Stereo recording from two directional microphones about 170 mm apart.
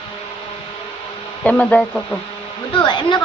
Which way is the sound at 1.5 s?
10° left (ahead or behind).